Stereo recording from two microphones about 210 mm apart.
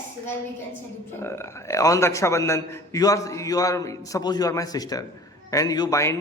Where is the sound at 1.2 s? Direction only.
10° left (ahead or behind).